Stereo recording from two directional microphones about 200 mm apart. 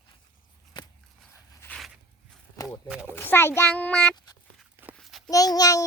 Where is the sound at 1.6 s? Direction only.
5° left (ahead or behind).